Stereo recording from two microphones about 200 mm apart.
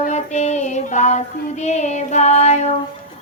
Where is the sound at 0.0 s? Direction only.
35° left (ahead or behind).